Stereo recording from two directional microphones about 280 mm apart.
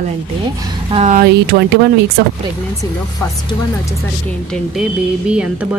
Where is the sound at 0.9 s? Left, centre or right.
Right.